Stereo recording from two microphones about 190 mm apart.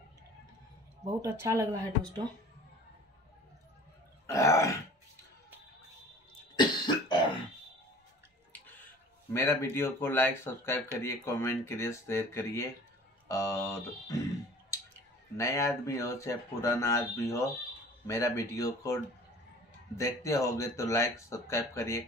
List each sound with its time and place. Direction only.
1.2 s speech: 15° right (ahead or behind)
4.3 s speech: 15° left (ahead or behind)
6.5 s cough: 25° left (ahead or behind)
9.3 s speech: 15° left (ahead or behind)
15.3 s speech: 15° left (ahead or behind)
20.0 s speech: 15° left (ahead or behind)